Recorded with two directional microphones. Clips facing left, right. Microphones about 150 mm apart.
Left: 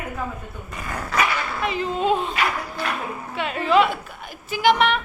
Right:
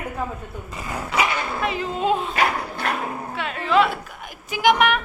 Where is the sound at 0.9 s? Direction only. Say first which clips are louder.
Even; 10° right (ahead or behind).